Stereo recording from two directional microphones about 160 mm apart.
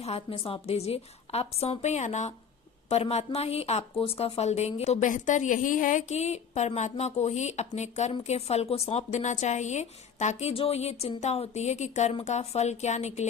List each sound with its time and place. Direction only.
0.0 s a woman's voice: 40° left (ahead or behind)